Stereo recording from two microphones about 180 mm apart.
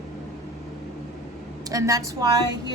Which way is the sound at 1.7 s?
20° right (ahead or behind).